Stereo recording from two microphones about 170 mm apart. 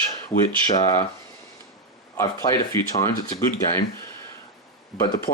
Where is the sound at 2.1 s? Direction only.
20° left (ahead or behind).